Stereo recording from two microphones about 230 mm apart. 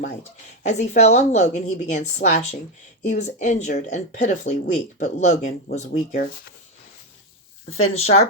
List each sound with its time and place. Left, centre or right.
0.6 s speech: left
7.9 s speech: left